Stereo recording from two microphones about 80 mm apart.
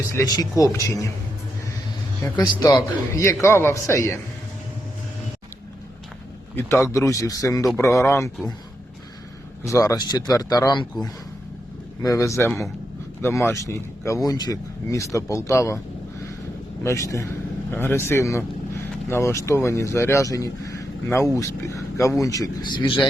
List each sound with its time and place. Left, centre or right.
0.1 s speech: left
2.3 s speech: left
3.1 s speech: left
6.6 s speech: left
9.6 s speech: left
12.0 s speech: left
12.5 s a man's voice: centre
13.2 s speech: left
14.3 s speech: left
16.8 s speech: left
17.7 s speech: left
22.6 s speech: left